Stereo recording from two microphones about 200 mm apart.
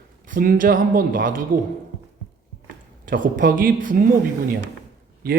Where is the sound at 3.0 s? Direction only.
40° right (ahead or behind).